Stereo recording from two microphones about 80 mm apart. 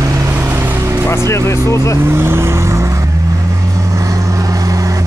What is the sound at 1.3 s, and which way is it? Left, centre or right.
Speech, left.